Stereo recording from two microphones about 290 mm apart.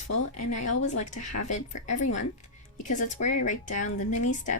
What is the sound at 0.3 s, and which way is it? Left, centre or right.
A woman's voice, left.